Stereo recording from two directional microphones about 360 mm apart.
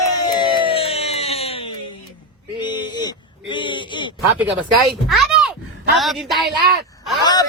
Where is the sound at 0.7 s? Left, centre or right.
Centre.